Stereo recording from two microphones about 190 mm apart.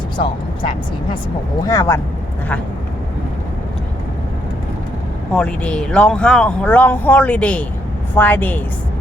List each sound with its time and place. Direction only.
0.2 s speech: 25° left (ahead or behind)
5.3 s speech: 5° left (ahead or behind)